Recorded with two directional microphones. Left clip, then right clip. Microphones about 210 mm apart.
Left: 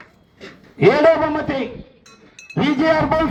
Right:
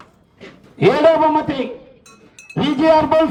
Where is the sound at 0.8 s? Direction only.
25° right (ahead or behind).